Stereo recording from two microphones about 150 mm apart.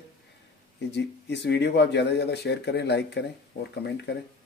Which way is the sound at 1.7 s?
90° left.